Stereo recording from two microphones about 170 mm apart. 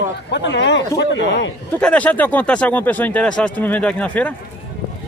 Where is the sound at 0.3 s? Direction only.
90° left.